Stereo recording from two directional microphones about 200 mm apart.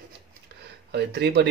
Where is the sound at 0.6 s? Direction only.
55° right (ahead or behind).